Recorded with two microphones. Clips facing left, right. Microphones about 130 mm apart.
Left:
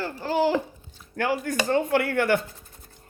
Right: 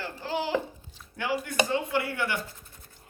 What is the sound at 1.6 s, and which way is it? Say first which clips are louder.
Speech: left 6 dB; 45° left (ahead or behind).